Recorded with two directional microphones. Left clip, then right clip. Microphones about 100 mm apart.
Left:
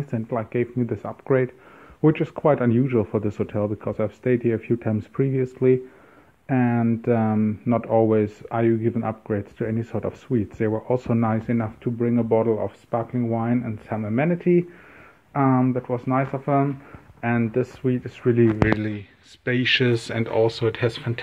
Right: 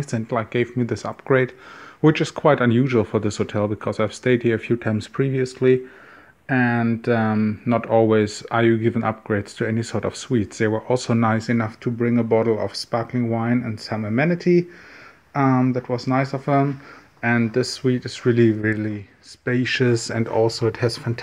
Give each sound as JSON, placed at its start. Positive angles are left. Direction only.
{"t": 0.1, "sound": "speech", "side_deg": -45}
{"t": 8.0, "sound": "speech", "side_deg": -40}
{"t": 17.8, "sound": "speech", "side_deg": -50}
{"t": 18.7, "sound": "speech", "side_deg": 5}
{"t": 19.5, "sound": "speech", "side_deg": -10}